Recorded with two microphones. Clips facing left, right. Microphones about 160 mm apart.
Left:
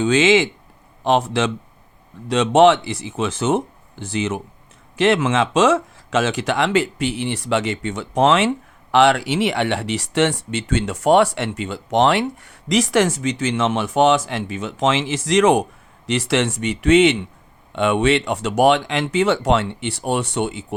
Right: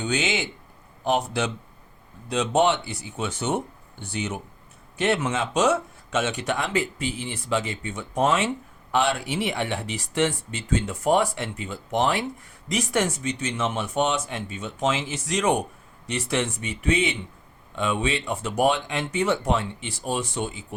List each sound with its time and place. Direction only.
0.0 s speech: 90° left; by 20.7 s 75° left (ahead or behind)